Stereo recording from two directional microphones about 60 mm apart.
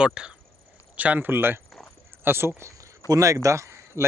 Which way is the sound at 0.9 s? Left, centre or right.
Right.